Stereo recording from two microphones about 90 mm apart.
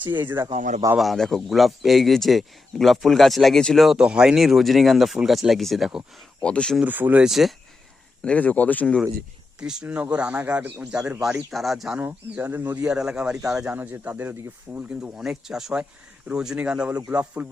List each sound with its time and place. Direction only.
0.3 s speech: 50° right (ahead or behind)
0.9 s speech: centre (ahead or behind)
4.0 s speech: 10° right (ahead or behind)
6.4 s speech: 10° left (ahead or behind)
6.8 s speech: 20° right (ahead or behind)
7.2 s speech: 5° right (ahead or behind)
8.2 s speech: 15° left (ahead or behind)
9.6 s speech: 10° right (ahead or behind)
11.2 s speech: 5° right (ahead or behind)
12.4 s speech: 25° right (ahead or behind)
13.7 s speech: 20° right (ahead or behind)